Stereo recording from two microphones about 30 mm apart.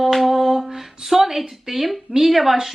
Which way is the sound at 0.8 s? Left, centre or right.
Centre.